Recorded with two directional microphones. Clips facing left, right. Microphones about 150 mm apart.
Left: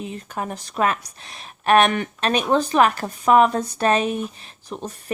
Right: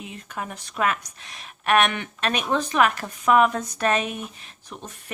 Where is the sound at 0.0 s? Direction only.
35° left (ahead or behind).